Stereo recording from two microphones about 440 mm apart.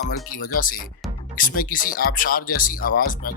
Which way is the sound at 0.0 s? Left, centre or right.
Centre.